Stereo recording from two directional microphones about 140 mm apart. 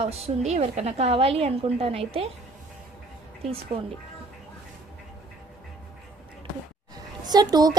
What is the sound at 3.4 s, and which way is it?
Speech, 45° right (ahead or behind).